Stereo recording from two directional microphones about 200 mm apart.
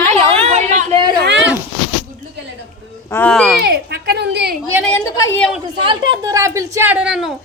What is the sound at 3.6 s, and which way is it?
Speech, 50° right (ahead or behind).